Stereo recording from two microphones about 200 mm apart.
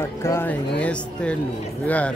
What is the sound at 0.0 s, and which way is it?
Speech, 15° left (ahead or behind).